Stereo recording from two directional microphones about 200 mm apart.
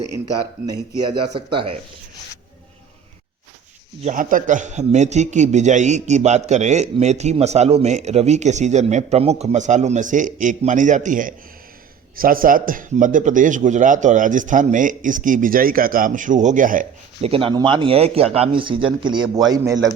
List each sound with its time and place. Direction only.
1.4 s speech: 25° right (ahead or behind)
4.0 s a man's voice: 40° right (ahead or behind)
17.2 s speech: 30° right (ahead or behind)